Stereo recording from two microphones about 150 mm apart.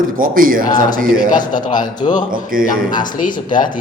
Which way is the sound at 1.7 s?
30° left (ahead or behind).